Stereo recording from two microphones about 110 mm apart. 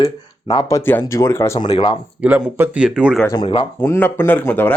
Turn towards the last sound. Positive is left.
turn(degrees=15)  # may be behind; listen again after turning